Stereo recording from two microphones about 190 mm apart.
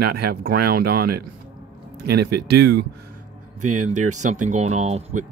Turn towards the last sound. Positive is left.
turn(degrees=-35)  # may be behind; listen again after turning